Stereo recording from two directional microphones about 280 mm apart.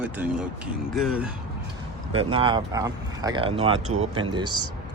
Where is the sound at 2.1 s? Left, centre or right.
Centre.